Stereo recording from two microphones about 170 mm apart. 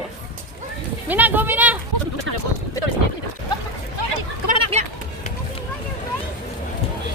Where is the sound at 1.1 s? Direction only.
10° right (ahead or behind).